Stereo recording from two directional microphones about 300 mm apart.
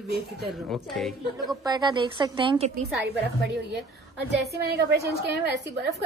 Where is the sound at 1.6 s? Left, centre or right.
Centre.